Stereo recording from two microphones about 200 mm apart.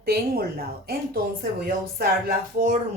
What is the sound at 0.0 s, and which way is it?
Speech, 50° right (ahead or behind).